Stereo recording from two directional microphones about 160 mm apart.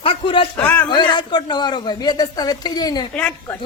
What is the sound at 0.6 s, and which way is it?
Speech, 10° left (ahead or behind).